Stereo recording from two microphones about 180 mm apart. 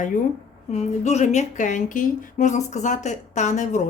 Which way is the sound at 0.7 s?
40° left (ahead or behind).